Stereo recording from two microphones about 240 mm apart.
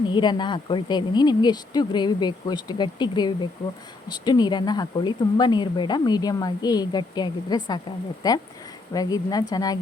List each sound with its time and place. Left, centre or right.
0.1 s speech: centre